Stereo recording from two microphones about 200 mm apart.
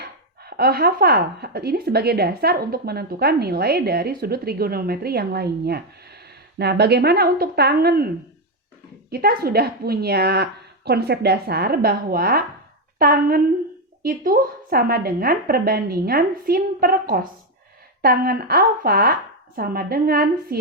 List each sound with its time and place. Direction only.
0.0 s speech: 50° right (ahead or behind)